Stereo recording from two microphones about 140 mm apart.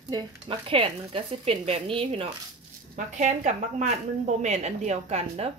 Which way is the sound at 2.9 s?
55° right (ahead or behind).